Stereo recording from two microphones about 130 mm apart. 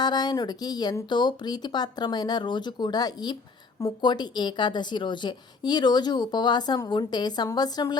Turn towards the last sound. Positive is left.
turn(degrees=30)  # may be behind; listen again after turning